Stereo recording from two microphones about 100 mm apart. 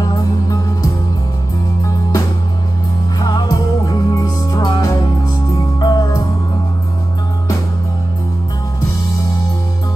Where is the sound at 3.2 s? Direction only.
40° left (ahead or behind).